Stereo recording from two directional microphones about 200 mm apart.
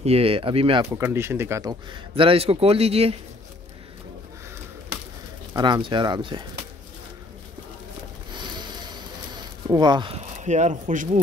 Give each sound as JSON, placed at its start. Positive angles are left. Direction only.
{"t": 0.0, "sound": "a man's voice", "side_deg": -30}
{"t": 0.8, "sound": "a man's voice", "side_deg": -10}
{"t": 5.5, "sound": "a man's voice", "side_deg": -20}
{"t": 8.3, "sound": "a sound", "side_deg": -20}
{"t": 9.7, "sound": "speech", "side_deg": -20}